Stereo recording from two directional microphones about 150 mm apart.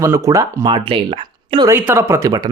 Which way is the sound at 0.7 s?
35° right (ahead or behind).